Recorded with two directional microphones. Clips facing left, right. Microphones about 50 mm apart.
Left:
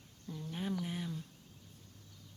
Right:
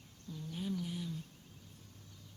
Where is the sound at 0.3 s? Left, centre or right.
Left.